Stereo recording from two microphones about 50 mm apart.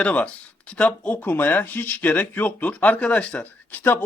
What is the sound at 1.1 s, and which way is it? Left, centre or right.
Speech, left.